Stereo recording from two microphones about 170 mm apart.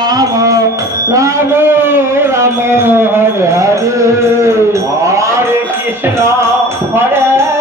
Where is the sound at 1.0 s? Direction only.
20° right (ahead or behind).